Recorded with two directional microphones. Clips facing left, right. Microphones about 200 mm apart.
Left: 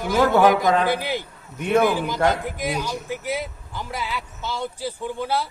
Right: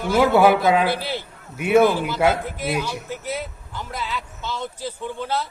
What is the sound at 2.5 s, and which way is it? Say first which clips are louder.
Speech: right 1 dB; 15° left (ahead or behind).